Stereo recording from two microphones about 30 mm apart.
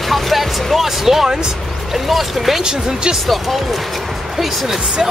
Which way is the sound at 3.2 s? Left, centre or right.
Centre.